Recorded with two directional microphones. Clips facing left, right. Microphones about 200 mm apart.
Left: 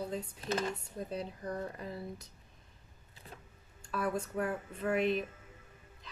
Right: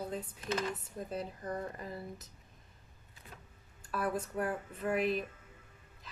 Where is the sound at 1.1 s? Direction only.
5° right (ahead or behind).